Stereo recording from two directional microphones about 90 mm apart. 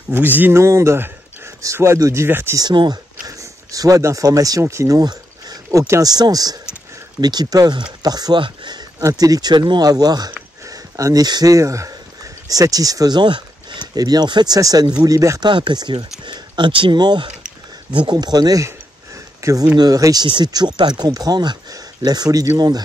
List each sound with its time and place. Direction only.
0.1 s speech: 20° right (ahead or behind)
0.6 s speech: 35° right (ahead or behind)
2.2 s speech: 25° right (ahead or behind)
2.7 s speech: 60° right (ahead or behind)
3.3 s speech: 40° right (ahead or behind)
8.4 s speech: 60° right (ahead or behind)
9.0 s speech: 45° right (ahead or behind)
15.4 s speech: 60° right (ahead or behind)
16.3 s speech: 60° right (ahead or behind); by 22.5 s 45° right (ahead or behind)